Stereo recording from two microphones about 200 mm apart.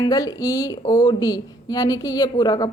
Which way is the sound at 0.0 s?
20° left (ahead or behind).